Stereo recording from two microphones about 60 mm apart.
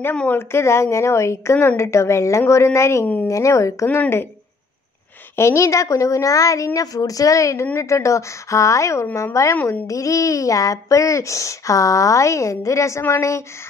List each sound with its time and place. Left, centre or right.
0.3 s speech: left
5.3 s speech: left